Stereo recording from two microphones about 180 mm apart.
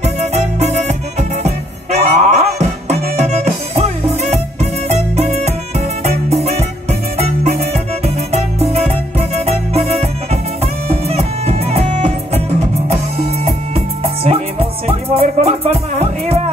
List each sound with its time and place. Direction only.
0.0 s music: 35° right (ahead or behind)